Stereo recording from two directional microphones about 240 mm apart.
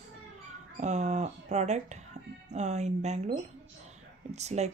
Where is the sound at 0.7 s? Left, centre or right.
Right.